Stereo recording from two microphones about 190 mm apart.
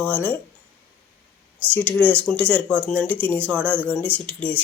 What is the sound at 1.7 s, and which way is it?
Speech, 10° left (ahead or behind).